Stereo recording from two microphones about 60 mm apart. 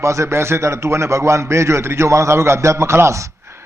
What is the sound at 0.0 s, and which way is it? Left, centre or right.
A man's voice, right.